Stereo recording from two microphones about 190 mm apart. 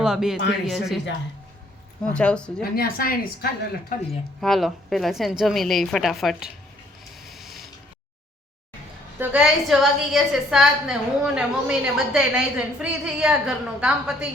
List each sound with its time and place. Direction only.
0.0 s a woman's voice: 5° right (ahead or behind)
2.1 s a woman's voice: 5° left (ahead or behind)
2.6 s speech: 50° left (ahead or behind)
4.4 s a woman's voice: centre (ahead or behind)
7.2 s a sound: centre (ahead or behind)
9.1 s a woman's voice: 10° right (ahead or behind)